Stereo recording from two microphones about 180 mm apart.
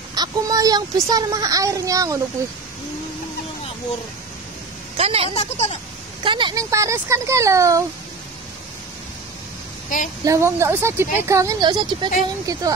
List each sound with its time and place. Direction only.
0.1 s a child's voice: 20° right (ahead or behind)
4.9 s a woman's voice: 35° right (ahead or behind)
5.3 s speech: 35° left (ahead or behind)
6.2 s speech: 25° right (ahead or behind)
9.9 s speech: 45° left (ahead or behind)
10.2 s speech: 15° right (ahead or behind)